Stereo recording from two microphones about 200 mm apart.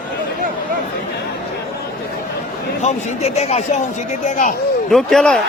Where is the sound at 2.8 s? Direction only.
30° left (ahead or behind).